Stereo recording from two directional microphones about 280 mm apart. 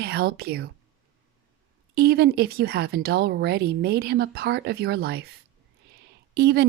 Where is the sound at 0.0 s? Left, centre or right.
Right.